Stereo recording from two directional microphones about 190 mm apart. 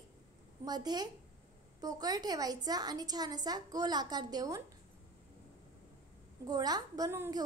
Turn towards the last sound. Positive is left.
turn(degrees=-15)  # may be behind; listen again after turning